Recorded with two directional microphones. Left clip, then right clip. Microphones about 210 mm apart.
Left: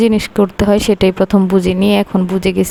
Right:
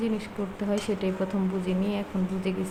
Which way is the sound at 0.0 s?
55° left (ahead or behind).